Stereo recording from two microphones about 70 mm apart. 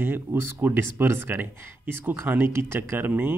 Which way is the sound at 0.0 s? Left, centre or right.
Right.